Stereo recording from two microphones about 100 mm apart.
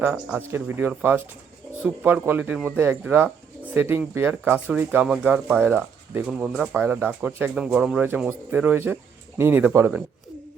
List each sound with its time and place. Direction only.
0.0 s speech: 15° right (ahead or behind)
2.2 s speech: 15° right (ahead or behind)
7.5 s speech: 5° right (ahead or behind); by 9.6 s 25° right (ahead or behind)